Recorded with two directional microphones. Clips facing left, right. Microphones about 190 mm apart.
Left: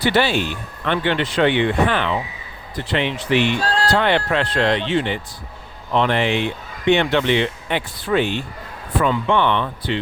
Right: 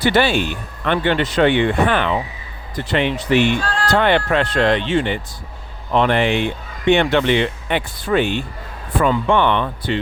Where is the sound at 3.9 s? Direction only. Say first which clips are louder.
Right 4 dB; 50° right (ahead or behind).